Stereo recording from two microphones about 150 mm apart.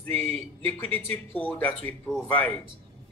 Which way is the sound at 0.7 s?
15° left (ahead or behind).